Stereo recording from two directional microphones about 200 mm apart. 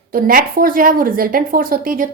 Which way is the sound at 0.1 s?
45° right (ahead or behind).